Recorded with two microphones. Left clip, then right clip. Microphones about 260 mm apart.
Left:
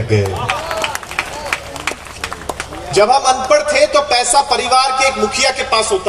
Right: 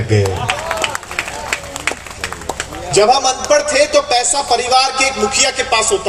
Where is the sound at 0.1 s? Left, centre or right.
Right.